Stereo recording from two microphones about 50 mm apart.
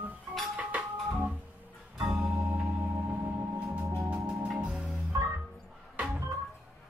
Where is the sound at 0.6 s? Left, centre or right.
Right.